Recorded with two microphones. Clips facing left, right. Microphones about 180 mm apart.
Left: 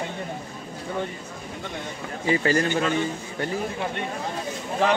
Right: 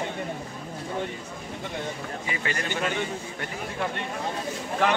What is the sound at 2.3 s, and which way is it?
Speech, 35° left (ahead or behind).